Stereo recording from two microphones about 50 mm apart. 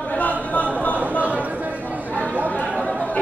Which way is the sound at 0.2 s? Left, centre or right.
Left.